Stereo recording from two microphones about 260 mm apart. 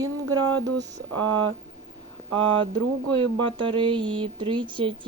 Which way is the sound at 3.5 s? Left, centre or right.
Centre.